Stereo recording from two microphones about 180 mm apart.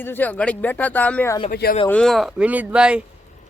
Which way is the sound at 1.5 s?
55° left (ahead or behind).